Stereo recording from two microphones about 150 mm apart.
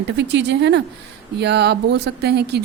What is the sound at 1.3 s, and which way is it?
A woman's voice, 90° right.